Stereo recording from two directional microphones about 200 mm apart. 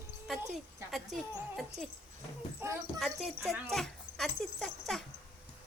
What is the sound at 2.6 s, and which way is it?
Speech, 10° right (ahead or behind).